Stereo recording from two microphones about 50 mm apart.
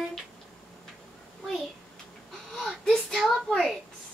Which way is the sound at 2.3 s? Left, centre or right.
Centre.